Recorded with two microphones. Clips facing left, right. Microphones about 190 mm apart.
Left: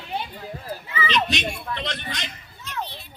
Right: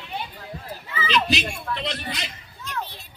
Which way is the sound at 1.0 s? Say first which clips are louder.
Right 1 dB; centre (ahead or behind).